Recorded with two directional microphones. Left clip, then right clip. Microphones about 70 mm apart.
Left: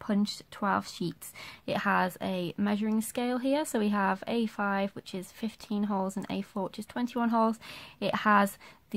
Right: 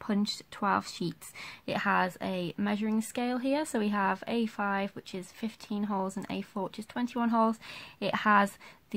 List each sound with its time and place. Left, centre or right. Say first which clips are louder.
0.0 s speech: even; centre